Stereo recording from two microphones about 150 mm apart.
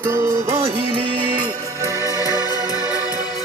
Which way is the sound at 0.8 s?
35° right (ahead or behind).